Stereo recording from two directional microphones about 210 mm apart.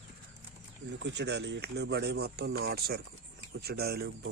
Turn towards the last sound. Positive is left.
turn(degrees=-50)  # may be behind; listen again after turning